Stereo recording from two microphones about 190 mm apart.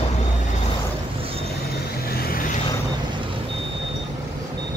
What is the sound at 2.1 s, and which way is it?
Vehicle, 55° left (ahead or behind).